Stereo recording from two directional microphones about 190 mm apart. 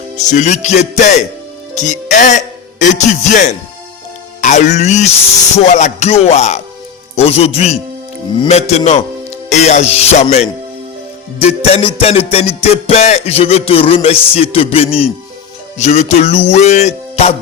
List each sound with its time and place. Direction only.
0.2 s music: 40° left (ahead or behind)
1.7 s a man's voice: 40° left (ahead or behind)
5.5 s music: 40° left (ahead or behind)